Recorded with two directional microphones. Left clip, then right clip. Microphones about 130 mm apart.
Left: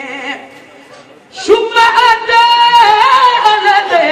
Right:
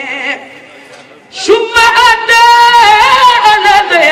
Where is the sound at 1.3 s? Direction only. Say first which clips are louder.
Right 1 dB; 25° right (ahead or behind).